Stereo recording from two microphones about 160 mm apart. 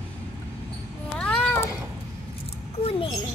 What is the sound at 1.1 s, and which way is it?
Cat, 10° left (ahead or behind).